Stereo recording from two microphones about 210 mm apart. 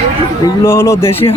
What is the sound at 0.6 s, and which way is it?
Speech, 15° left (ahead or behind).